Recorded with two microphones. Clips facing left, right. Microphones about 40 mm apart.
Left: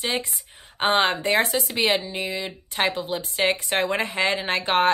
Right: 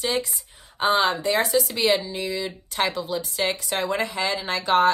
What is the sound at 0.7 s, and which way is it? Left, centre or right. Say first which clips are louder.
Speech: even; left.